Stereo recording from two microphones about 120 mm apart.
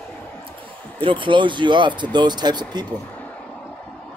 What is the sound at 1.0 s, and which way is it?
Speech, 45° right (ahead or behind).